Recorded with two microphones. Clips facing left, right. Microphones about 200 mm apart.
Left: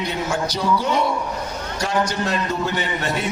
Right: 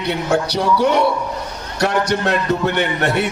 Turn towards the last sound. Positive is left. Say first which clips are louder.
# right 5 dB
turn(degrees=-65)  # may be behind; listen again after turning